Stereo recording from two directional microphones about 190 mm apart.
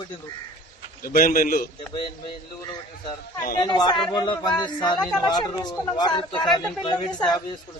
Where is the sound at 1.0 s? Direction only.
50° left (ahead or behind).